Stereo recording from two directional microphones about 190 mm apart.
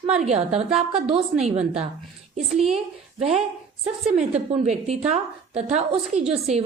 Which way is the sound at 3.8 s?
35° right (ahead or behind).